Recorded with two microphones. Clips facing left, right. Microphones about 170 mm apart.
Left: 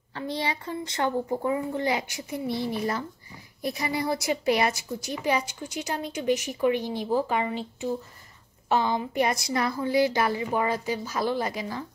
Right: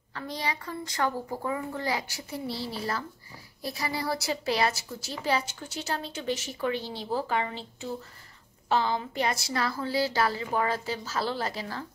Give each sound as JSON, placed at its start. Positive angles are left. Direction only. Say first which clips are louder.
{"t": 0.1, "sound": "a child's voice", "louder": "left 3 dB", "side_deg": 25}